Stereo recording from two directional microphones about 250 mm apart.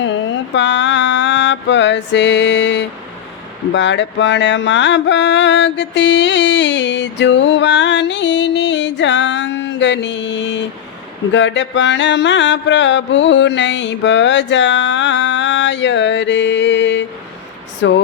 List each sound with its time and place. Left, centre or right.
0.0 s mantra: left